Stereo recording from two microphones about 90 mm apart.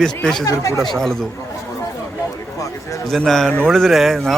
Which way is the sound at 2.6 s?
35° left (ahead or behind).